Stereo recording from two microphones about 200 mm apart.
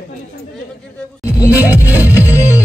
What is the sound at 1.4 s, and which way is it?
Music, 15° left (ahead or behind).